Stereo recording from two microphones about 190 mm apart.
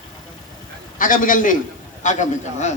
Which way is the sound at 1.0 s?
45° left (ahead or behind).